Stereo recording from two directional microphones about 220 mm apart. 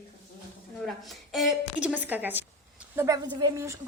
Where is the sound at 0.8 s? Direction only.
Centre (ahead or behind).